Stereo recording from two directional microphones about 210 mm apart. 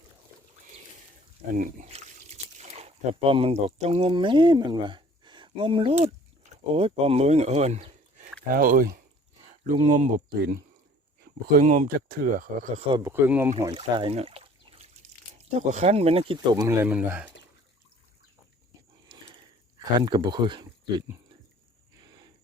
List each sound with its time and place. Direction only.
1.5 s speech: 35° right (ahead or behind)
8.5 s speech: 45° right (ahead or behind)
9.5 s speech: 30° right (ahead or behind)
10.2 s speech: 50° right (ahead or behind)
12.9 s speech: 15° right (ahead or behind)
16.8 s speech: 5° right (ahead or behind)
19.8 s speech: 20° right (ahead or behind)